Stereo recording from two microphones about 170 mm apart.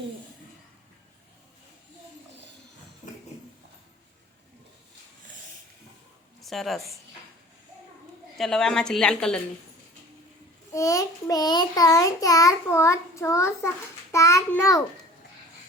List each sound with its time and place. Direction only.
3.0 s a sound: 25° left (ahead or behind)
6.4 s a woman's voice: centre (ahead or behind)
8.4 s a woman's voice: 5° left (ahead or behind)
10.8 s a child's voice: 20° left (ahead or behind)